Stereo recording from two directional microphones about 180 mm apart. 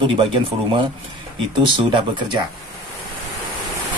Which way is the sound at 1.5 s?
25° right (ahead or behind).